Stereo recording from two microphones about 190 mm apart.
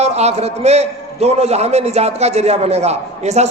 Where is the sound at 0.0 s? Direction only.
35° right (ahead or behind).